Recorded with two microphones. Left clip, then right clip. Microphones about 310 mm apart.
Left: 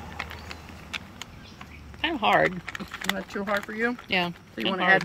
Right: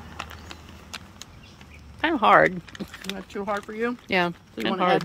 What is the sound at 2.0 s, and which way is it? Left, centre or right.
Speech, centre.